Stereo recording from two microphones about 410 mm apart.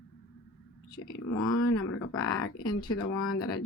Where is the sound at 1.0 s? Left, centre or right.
Left.